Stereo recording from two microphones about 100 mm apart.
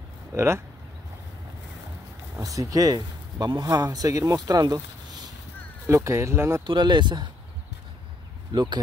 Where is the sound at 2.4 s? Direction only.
35° right (ahead or behind).